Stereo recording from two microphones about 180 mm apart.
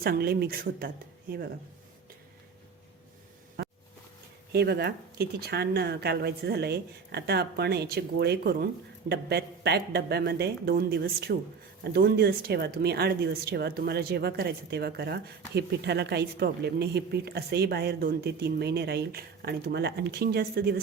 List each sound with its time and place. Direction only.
0.0 s speech: 60° right (ahead or behind)
3.6 s a sound: 65° right (ahead or behind)
4.5 s speech: 65° right (ahead or behind)